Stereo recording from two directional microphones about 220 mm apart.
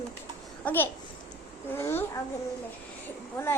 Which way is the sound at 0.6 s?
10° left (ahead or behind).